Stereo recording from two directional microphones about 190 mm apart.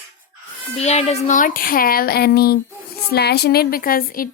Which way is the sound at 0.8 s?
35° left (ahead or behind).